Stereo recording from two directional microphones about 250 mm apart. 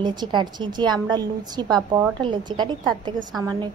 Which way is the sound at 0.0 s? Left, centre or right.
Centre.